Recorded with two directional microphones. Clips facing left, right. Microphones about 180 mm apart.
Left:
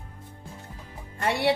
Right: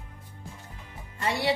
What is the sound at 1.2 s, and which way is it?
Speech, 60° left (ahead or behind).